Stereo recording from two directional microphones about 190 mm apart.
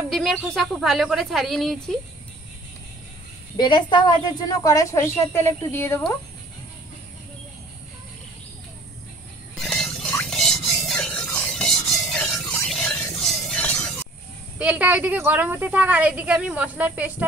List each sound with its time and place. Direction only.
0.1 s speech: centre (ahead or behind)
3.5 s a woman's voice: 25° left (ahead or behind)
9.6 s a sound: centre (ahead or behind)
10.1 s rub: 5° left (ahead or behind)
14.6 s a woman's voice: 5° right (ahead or behind)